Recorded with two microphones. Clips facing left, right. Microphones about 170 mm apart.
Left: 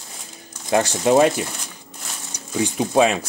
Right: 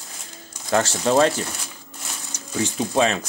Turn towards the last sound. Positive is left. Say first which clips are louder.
# left 3 dB
turn(degrees=10)  # may be behind; listen again after turning